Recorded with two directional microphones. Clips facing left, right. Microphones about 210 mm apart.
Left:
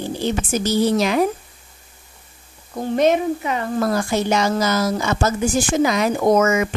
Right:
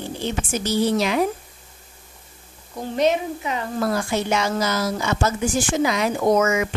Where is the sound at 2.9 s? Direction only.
50° left (ahead or behind).